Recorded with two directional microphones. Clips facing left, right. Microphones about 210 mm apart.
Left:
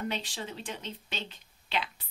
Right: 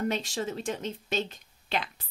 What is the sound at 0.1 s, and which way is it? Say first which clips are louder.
Speech: right 6 dB; 45° right (ahead or behind).